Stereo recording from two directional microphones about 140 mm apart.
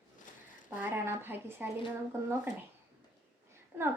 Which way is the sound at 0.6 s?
15° right (ahead or behind).